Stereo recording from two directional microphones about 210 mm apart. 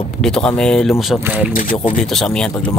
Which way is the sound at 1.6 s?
40° left (ahead or behind).